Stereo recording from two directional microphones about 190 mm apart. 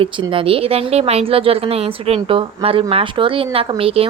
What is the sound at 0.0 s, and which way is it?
Speech, 25° right (ahead or behind).